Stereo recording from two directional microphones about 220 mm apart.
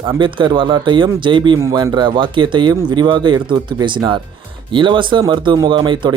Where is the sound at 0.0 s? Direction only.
20° right (ahead or behind).